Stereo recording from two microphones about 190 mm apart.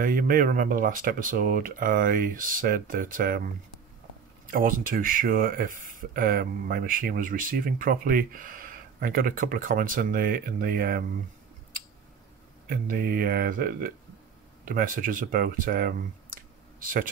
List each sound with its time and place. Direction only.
0.0 s speech: 50° right (ahead or behind)
4.5 s speech: 45° right (ahead or behind)
12.6 s speech: 50° right (ahead or behind)